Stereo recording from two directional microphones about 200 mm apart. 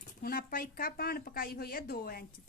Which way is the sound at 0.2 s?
50° left (ahead or behind).